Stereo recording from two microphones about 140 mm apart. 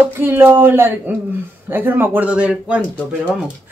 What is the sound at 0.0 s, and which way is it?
Speech, 15° right (ahead or behind).